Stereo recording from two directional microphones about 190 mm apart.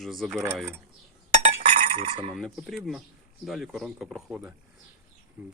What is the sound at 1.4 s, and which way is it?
Chink, 35° right (ahead or behind).